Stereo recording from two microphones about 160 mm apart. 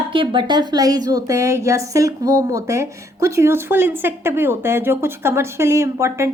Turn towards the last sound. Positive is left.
turn(degrees=-15)  # may be behind; listen again after turning